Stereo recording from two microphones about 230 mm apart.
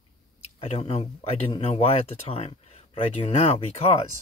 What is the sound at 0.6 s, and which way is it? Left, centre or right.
Speech, left.